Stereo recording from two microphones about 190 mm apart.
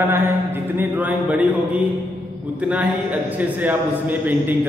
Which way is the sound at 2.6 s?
5° right (ahead or behind).